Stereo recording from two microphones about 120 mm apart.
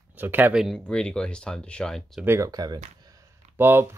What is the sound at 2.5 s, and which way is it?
Speech, 35° right (ahead or behind).